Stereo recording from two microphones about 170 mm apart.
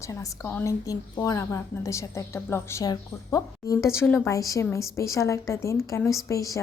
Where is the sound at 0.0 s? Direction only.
20° left (ahead or behind).